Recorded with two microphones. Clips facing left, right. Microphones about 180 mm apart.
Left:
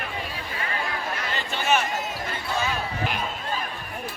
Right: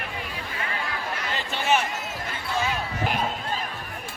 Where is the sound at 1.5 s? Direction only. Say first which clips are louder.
Even; 25° right (ahead or behind).